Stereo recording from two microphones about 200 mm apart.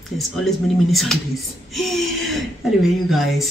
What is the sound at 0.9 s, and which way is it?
Speech, centre (ahead or behind).